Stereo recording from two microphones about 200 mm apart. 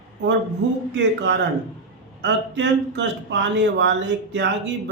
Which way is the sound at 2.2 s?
60° right (ahead or behind).